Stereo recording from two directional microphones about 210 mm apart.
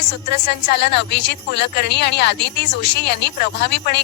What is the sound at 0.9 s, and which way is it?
Speech, 55° left (ahead or behind).